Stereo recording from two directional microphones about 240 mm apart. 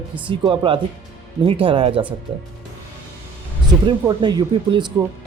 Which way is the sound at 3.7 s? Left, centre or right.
Centre.